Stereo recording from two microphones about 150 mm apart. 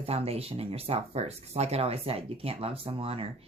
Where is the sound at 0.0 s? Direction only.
40° right (ahead or behind).